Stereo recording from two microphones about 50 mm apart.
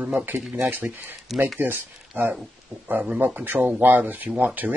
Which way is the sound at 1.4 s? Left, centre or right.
Right.